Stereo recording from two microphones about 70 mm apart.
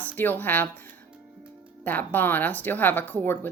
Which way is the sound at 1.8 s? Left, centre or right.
Left.